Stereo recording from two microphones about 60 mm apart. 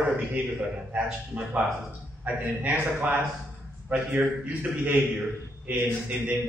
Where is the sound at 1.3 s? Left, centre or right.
Right.